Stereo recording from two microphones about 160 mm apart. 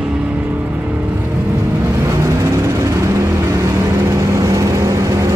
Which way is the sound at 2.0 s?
15° right (ahead or behind).